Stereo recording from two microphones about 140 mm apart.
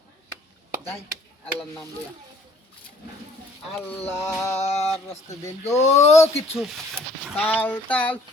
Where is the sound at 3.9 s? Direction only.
15° left (ahead or behind).